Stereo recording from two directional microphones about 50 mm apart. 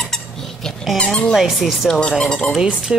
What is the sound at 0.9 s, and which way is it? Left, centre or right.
Speech, centre.